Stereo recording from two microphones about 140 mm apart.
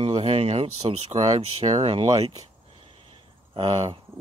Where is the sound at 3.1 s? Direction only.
35° right (ahead or behind).